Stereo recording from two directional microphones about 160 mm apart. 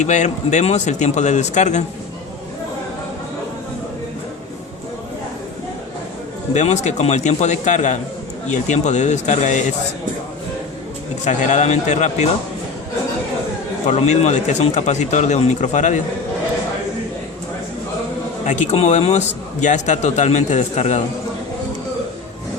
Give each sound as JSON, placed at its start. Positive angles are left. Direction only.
{"t": 0.0, "sound": "a man's voice", "side_deg": 45}
{"t": 6.5, "sound": "a man's voice", "side_deg": 45}
{"t": 11.3, "sound": "a man's voice", "side_deg": 50}
{"t": 13.8, "sound": "a man's voice", "side_deg": 45}
{"t": 18.4, "sound": "a man's voice", "side_deg": 50}